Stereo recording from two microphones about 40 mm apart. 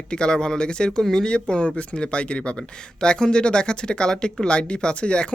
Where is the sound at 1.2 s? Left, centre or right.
Left.